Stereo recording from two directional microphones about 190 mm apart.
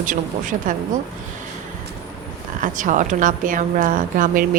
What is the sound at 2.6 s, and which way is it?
A woman's voice, 45° right (ahead or behind).